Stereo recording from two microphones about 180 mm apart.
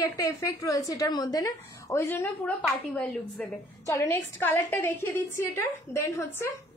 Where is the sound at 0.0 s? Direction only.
15° left (ahead or behind).